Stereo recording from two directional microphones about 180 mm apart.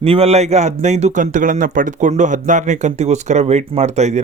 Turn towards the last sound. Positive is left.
turn(degrees=-40)  # may be behind; listen again after turning